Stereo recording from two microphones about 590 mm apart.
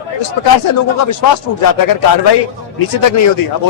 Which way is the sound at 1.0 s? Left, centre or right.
Left.